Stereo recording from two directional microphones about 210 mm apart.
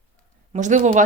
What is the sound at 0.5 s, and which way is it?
Speech, 35° right (ahead or behind).